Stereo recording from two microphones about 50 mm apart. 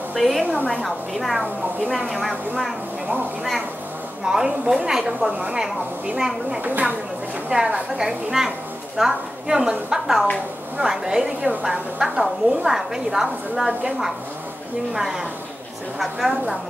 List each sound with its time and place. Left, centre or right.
0.1 s speech: centre
4.2 s a woman's voice: centre
6.6 s speech: right
7.5 s a woman's voice: right
8.0 s a woman's voice: centre
15.0 s a woman's voice: centre